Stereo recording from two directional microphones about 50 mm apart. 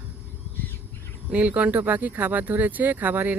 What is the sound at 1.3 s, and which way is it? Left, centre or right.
Speech, right.